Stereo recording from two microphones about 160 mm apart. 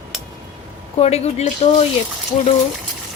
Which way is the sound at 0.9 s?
40° left (ahead or behind).